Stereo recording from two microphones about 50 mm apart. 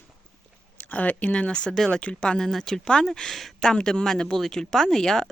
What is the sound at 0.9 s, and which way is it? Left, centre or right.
Speech, left.